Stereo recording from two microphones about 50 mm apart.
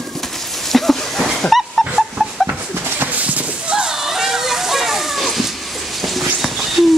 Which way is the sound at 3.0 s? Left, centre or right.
Right.